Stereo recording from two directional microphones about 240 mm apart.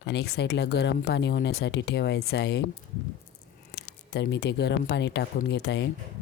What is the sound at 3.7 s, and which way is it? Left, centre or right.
Speech, left.